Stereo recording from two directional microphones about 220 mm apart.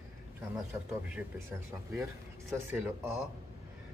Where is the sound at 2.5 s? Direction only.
10° right (ahead or behind).